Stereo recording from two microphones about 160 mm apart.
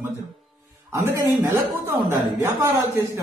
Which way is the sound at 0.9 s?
20° right (ahead or behind).